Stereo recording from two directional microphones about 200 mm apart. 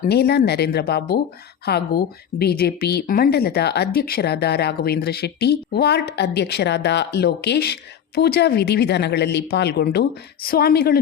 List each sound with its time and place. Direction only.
0.0 s speech: 55° left (ahead or behind)